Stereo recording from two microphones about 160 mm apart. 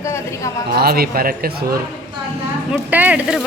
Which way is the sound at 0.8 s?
70° right (ahead or behind).